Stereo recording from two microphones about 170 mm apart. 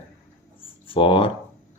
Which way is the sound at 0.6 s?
30° left (ahead or behind).